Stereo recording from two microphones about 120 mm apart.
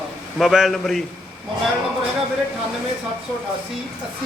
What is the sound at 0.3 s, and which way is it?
Speech, centre (ahead or behind).